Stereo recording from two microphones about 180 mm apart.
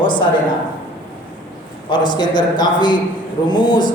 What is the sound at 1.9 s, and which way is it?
A man's voice, 25° left (ahead or behind).